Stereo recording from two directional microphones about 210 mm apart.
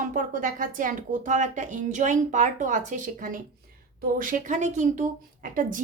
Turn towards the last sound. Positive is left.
turn(degrees=-40)  # may be behind; listen again after turning